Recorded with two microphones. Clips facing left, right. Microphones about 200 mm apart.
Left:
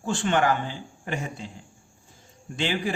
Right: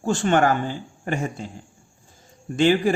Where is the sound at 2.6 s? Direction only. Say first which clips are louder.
Right 9 dB; 45° right (ahead or behind).